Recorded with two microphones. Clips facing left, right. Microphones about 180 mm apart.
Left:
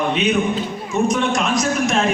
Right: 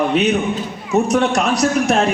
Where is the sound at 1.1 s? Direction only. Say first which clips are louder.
Right 3 dB; 65° right (ahead or behind).